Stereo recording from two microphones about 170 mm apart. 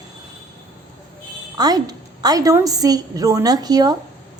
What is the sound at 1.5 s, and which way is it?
A woman's voice, 25° right (ahead or behind).